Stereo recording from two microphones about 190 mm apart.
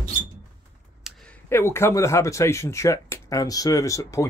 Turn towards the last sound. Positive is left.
turn(degrees=15)  # may be behind; listen again after turning